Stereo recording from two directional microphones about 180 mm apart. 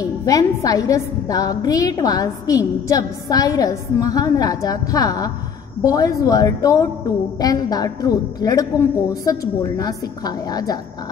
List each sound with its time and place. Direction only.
0.0 s a woman's voice: 20° left (ahead or behind)